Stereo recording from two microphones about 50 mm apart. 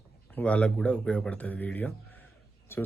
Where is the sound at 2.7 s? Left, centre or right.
Left.